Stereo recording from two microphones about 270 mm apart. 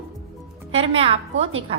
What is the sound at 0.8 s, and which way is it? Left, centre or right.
Speech, right.